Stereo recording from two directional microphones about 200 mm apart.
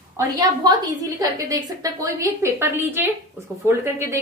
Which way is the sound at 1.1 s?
15° right (ahead or behind).